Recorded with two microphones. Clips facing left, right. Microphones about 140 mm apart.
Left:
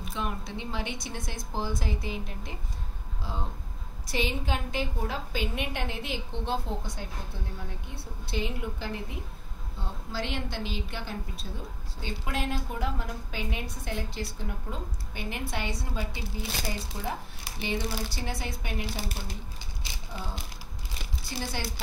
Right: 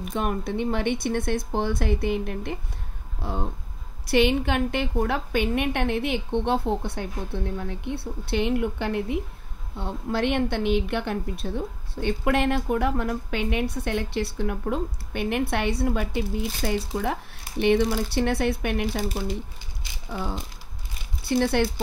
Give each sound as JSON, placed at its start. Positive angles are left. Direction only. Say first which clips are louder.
{"t": 0.1, "sound": "a woman's voice", "louder": "right 8 dB", "side_deg": -55}
{"t": 16.6, "sound": "a woman's voice", "louder": "right 11 dB", "side_deg": -80}